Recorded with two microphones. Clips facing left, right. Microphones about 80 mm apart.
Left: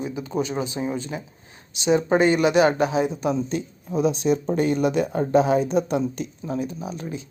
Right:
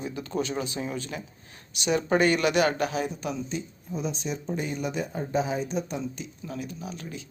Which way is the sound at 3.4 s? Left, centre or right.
Left.